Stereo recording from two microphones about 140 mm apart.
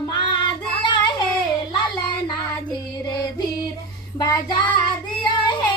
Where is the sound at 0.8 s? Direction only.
35° left (ahead or behind).